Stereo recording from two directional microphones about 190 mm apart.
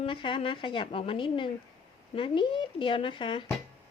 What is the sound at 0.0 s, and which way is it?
A woman's voice, 25° left (ahead or behind).